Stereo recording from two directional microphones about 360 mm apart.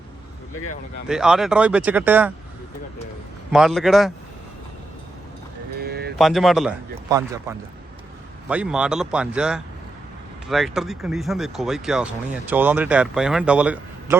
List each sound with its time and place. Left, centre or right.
1.0 s speech: centre
3.5 s speech: centre
5.8 s music: right
6.1 s speech: centre